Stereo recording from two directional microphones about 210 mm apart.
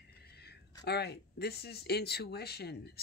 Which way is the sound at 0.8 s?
50° left (ahead or behind).